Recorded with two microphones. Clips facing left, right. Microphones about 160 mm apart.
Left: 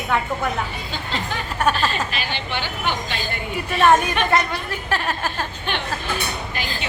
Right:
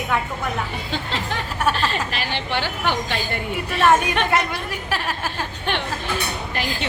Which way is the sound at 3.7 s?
Centre (ahead or behind).